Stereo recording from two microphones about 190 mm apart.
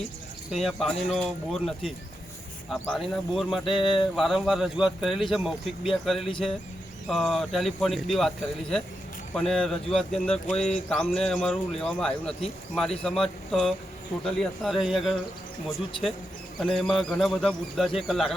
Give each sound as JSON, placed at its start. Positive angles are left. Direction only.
{"t": 0.5, "sound": "speech", "side_deg": 0}
{"t": 3.8, "sound": "a sound", "side_deg": 25}
{"t": 4.1, "sound": "speech", "side_deg": 0}
{"t": 16.6, "sound": "speech", "side_deg": 0}